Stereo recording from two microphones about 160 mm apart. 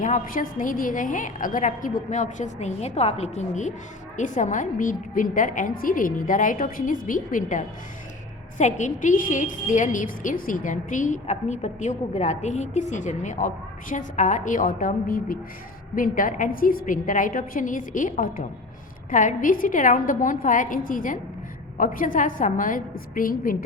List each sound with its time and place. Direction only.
0.0 s a woman's voice: 55° left (ahead or behind)